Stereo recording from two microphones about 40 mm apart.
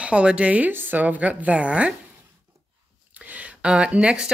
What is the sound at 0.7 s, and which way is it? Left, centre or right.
Speech, right.